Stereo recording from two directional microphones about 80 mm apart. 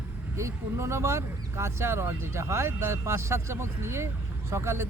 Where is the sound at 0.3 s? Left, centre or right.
Right.